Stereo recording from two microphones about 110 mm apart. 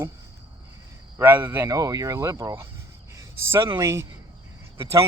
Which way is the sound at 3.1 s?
25° right (ahead or behind).